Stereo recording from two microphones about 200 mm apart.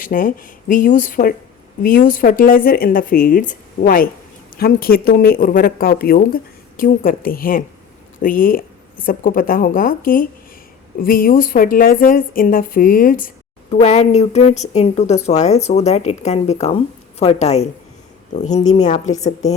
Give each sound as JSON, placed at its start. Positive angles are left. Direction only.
{"t": 0.0, "sound": "a woman's voice", "side_deg": 45}